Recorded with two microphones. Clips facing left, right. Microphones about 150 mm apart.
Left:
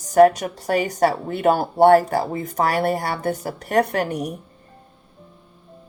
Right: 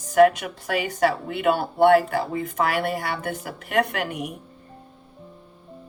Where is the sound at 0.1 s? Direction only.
40° left (ahead or behind).